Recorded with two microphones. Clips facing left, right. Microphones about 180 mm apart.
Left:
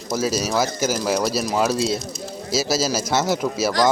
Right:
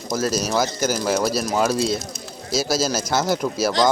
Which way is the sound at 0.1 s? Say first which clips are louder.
Even; 5° left (ahead or behind).